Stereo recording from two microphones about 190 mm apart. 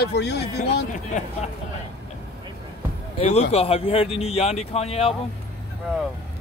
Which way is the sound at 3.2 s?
35° left (ahead or behind).